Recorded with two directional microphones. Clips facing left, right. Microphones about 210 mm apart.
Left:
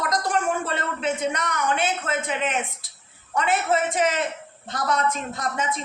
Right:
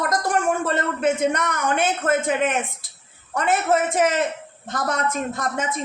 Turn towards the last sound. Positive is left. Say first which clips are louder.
# right 2 dB
turn(degrees=-50)  # may be behind; listen again after turning